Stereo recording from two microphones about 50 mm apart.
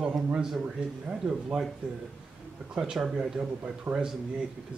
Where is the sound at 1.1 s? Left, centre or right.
Right.